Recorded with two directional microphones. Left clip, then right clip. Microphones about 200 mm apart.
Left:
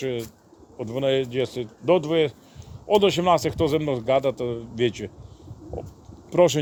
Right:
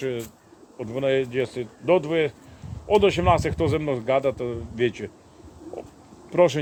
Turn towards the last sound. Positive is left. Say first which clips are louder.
# left 1 dB
turn(degrees=35)  # may be behind; listen again after turning